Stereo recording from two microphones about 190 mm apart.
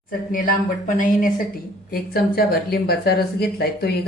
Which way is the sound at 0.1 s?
45° left (ahead or behind).